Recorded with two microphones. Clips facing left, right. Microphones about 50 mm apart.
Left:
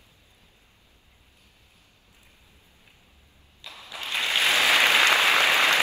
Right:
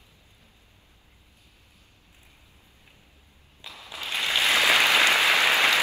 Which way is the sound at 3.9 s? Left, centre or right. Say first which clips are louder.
Left 1 dB; left.